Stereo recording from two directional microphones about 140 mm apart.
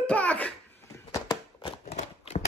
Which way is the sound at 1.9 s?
55° left (ahead or behind).